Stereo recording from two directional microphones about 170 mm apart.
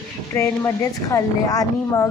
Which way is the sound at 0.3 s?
15° left (ahead or behind).